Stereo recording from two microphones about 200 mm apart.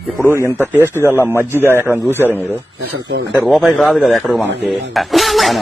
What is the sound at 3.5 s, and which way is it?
A man's voice, centre (ahead or behind).